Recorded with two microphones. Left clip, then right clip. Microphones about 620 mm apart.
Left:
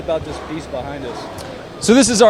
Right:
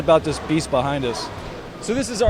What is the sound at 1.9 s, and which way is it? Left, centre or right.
Speech, left.